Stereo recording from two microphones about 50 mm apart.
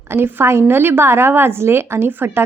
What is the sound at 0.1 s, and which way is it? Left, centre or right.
A woman's voice, right.